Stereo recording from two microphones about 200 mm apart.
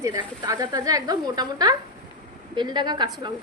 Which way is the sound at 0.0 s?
15° right (ahead or behind).